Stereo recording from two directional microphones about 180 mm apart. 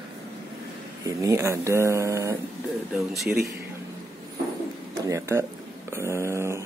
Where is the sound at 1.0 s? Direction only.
15° right (ahead or behind).